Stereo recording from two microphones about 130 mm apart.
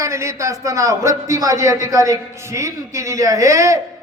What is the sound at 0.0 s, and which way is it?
A man's voice, 20° right (ahead or behind).